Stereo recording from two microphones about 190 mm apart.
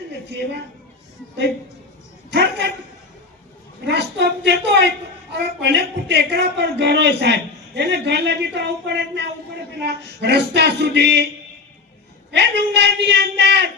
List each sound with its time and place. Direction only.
0.3 s a man's voice: 65° right (ahead or behind)
2.3 s a man's voice: 65° right (ahead or behind)
3.8 s a man's voice: 65° right (ahead or behind)
12.3 s a man's voice: 65° right (ahead or behind)